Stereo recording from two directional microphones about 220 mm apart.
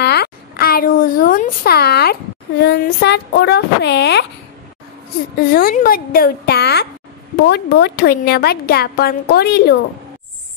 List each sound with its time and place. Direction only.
0.0 s a woman's voice: 45° left (ahead or behind)
5.5 s a woman's voice: 40° left (ahead or behind)